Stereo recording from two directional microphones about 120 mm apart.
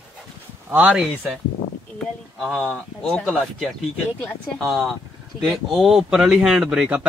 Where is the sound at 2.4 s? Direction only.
5° left (ahead or behind).